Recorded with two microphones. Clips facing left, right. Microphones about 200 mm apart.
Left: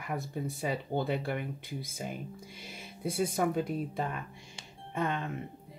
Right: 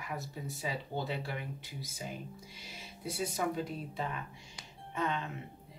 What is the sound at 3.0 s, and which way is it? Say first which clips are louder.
Speech: left 5 dB; 55° left (ahead or behind).